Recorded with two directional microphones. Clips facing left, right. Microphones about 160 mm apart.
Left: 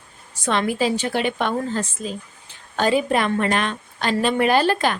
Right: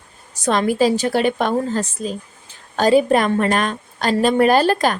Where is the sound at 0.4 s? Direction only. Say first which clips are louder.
Right 4 dB; 40° right (ahead or behind).